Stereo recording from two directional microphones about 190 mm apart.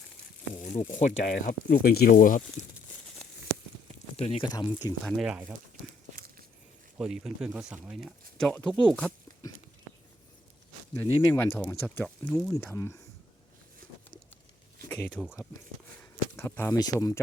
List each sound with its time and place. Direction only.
0.6 s speech: 40° left (ahead or behind)
4.2 s speech: 30° left (ahead or behind)
4.4 s speech: 20° left (ahead or behind)
5.0 s speech: centre (ahead or behind)
7.0 s speech: 5° right (ahead or behind)
10.9 s speech: 10° left (ahead or behind)
14.8 s speech: 10° left (ahead or behind)
16.3 s speech: 15° left (ahead or behind)